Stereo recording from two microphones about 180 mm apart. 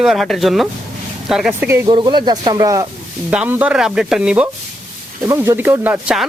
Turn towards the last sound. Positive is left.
turn(degrees=-5)  # may be behind; listen again after turning